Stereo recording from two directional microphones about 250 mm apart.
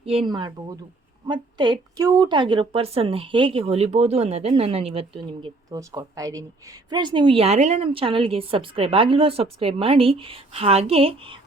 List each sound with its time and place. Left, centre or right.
0.0 s a woman's voice: right